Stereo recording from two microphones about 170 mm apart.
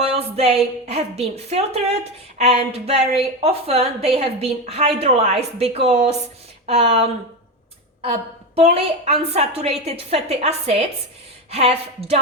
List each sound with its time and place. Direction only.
0.0 s a woman's voice: 35° right (ahead or behind)
8.5 s a woman's voice: 35° right (ahead or behind)